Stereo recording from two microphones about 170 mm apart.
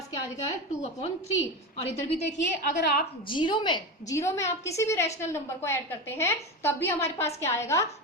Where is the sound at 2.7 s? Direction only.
65° left (ahead or behind).